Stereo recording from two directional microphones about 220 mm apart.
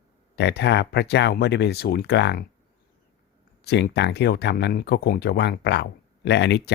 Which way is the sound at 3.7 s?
50° left (ahead or behind).